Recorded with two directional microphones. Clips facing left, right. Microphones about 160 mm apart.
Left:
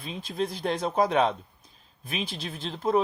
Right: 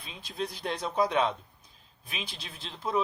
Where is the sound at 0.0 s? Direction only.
45° left (ahead or behind).